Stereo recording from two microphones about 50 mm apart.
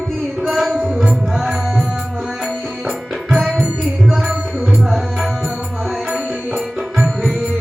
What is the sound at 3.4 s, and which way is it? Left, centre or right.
Music, centre.